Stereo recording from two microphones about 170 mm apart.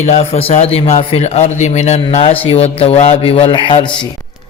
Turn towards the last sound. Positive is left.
turn(degrees=30)  # may be behind; listen again after turning